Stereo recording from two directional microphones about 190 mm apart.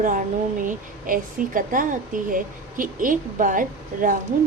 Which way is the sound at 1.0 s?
45° right (ahead or behind).